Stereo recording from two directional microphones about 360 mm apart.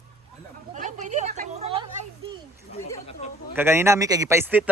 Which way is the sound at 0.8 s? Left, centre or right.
Centre.